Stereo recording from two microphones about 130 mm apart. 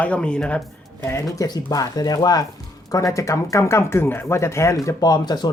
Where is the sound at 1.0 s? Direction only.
25° left (ahead or behind).